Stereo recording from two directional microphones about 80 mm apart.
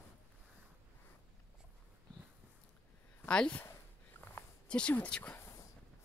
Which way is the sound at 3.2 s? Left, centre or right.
Centre.